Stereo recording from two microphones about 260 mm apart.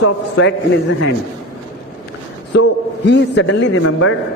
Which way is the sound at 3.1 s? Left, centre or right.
Left.